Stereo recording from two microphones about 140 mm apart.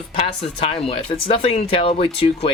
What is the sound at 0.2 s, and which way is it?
Speech, 45° left (ahead or behind).